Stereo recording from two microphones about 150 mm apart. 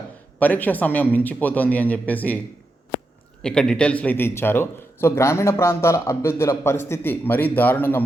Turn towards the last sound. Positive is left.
turn(degrees=15)  # may be behind; listen again after turning